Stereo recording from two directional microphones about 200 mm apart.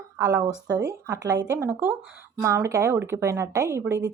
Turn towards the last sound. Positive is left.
turn(degrees=-15)  # may be behind; listen again after turning